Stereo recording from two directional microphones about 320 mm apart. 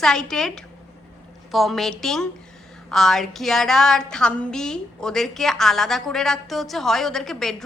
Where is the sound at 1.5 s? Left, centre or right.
Centre.